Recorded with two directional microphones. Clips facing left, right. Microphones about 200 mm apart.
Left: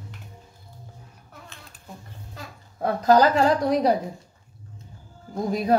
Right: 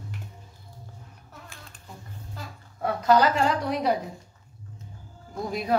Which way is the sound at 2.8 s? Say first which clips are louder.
Left 3 dB; 40° left (ahead or behind).